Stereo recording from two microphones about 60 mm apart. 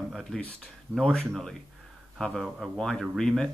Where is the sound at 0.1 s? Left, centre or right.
Centre.